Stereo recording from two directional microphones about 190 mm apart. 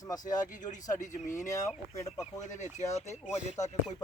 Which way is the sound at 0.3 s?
40° left (ahead or behind).